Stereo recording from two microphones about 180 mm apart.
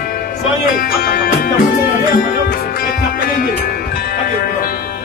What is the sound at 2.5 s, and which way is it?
Music, 55° left (ahead or behind).